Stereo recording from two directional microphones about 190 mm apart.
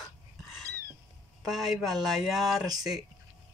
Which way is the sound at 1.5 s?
Centre (ahead or behind).